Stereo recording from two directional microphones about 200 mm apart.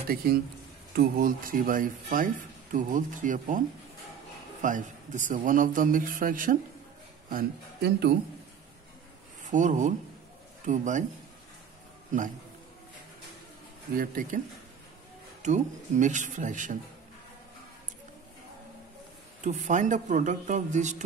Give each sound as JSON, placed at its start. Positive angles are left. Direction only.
{"t": 0.1, "sound": "a man's voice", "side_deg": -50}
{"t": 9.4, "sound": "speech", "side_deg": -40}
{"t": 13.9, "sound": "a man's voice", "side_deg": -45}
{"t": 15.4, "sound": "speech", "side_deg": -35}
{"t": 19.4, "sound": "speech", "side_deg": -40}